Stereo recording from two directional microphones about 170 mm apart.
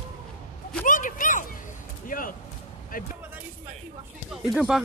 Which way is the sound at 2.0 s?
55° left (ahead or behind).